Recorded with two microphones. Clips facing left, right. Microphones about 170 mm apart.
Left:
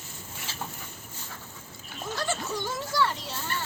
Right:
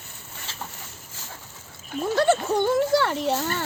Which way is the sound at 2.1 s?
60° right (ahead or behind).